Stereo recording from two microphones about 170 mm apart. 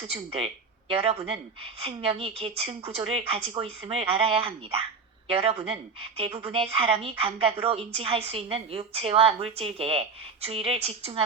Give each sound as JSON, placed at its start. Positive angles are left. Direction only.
{"t": 0.1, "sound": "a woman's voice", "side_deg": -35}